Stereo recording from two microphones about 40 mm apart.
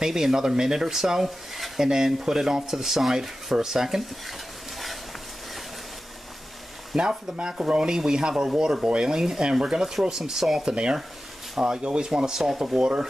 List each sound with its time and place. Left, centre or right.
0.0 s speech: centre
7.0 s speech: centre